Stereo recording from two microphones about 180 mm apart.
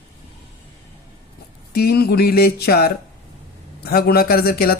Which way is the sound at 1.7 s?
60° left (ahead or behind).